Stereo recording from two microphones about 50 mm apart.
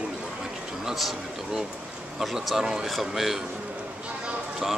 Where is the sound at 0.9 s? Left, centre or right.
Centre.